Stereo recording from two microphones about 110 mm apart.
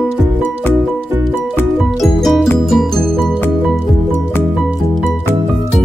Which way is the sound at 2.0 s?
Centre (ahead or behind).